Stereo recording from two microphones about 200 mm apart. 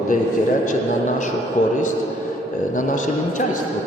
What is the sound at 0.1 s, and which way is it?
A man's voice, 40° left (ahead or behind).